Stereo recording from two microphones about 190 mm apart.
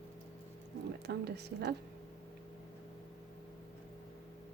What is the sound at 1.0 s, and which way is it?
Speech, 60° right (ahead or behind).